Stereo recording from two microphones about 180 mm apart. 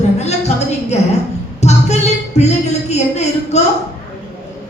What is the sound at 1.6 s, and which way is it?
Music, 40° left (ahead or behind).